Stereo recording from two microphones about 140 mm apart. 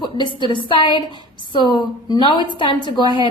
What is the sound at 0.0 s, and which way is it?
A woman's voice, 35° left (ahead or behind).